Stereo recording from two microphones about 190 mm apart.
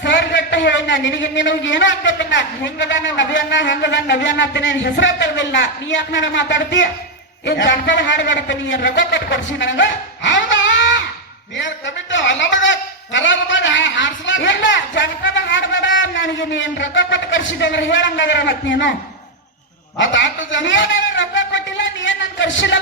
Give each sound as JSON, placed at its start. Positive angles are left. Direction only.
{"t": 0.0, "sound": "a man's voice", "side_deg": 70}
{"t": 20.0, "sound": "a man's voice", "side_deg": 75}